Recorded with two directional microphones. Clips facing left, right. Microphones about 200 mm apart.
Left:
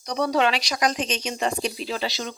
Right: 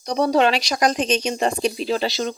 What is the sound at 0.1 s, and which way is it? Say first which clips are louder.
Speech: right 4 dB; 35° right (ahead or behind).